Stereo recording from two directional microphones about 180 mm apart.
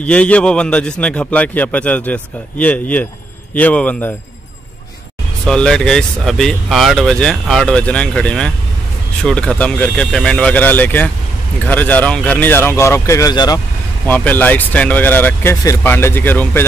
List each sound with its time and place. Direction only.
0.0 s a man's voice: 5° left (ahead or behind)
5.4 s a man's voice: 5° left (ahead or behind); by 13.6 s 20° left (ahead or behind)
14.0 s a man's voice: 10° left (ahead or behind)